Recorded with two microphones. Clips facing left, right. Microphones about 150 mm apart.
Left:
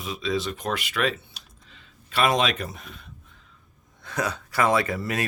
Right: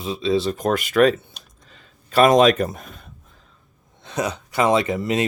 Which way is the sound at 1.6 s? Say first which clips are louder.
Right 2 dB; 45° right (ahead or behind).